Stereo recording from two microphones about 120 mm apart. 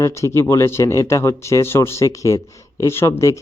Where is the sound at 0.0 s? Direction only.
25° left (ahead or behind).